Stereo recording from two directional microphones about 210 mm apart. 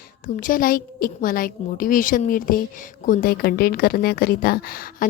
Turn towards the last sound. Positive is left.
turn(degrees=45)  # may be behind; listen again after turning